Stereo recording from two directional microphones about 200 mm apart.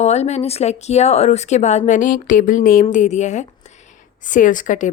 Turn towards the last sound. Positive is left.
turn(degrees=40)  # may be behind; listen again after turning